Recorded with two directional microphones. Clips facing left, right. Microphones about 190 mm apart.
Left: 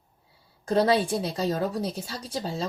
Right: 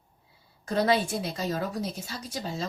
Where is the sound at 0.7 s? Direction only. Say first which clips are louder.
Left 3 dB; 30° left (ahead or behind).